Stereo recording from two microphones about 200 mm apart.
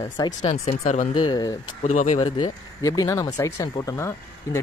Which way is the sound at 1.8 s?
35° left (ahead or behind).